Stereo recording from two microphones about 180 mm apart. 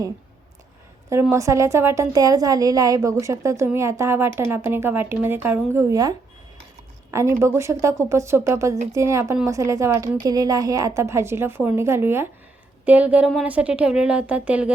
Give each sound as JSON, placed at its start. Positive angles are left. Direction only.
{"t": 1.1, "sound": "a woman's voice", "side_deg": -15}